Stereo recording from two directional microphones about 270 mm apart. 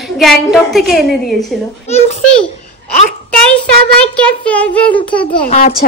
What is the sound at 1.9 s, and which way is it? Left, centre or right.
Speech, left.